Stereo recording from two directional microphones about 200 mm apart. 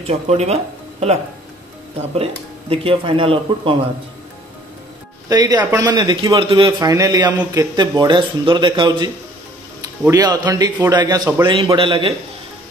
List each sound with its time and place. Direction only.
0.0 s speech: 30° right (ahead or behind)
2.7 s a man's voice: 25° right (ahead or behind)
5.3 s a man's voice: 20° right (ahead or behind)